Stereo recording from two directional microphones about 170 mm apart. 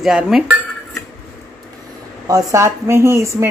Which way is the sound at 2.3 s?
20° right (ahead or behind).